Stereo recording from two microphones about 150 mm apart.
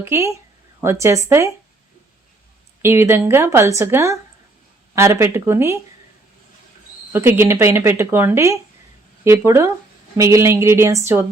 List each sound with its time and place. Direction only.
0.0 s speech: 20° right (ahead or behind)
2.8 s speech: 15° right (ahead or behind)
7.1 s speech: 15° right (ahead or behind)